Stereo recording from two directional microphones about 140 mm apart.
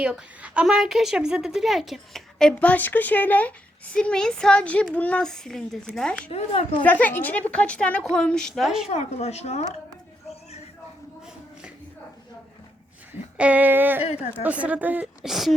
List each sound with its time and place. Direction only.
0.0 s a woman's voice: 5° right (ahead or behind)
6.3 s a woman's voice: 45° left (ahead or behind)
6.8 s a woman's voice: 10° left (ahead or behind)
8.9 s a woman's voice: 50° left (ahead or behind)
13.3 s a woman's voice: 10° right (ahead or behind)
14.0 s a woman's voice: 50° left (ahead or behind)
14.4 s a woman's voice: 10° right (ahead or behind)